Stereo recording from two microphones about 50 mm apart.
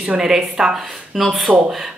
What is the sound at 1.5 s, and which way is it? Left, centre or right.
Speech, right.